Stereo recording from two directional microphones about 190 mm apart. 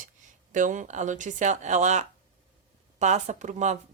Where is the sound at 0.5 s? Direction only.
40° right (ahead or behind).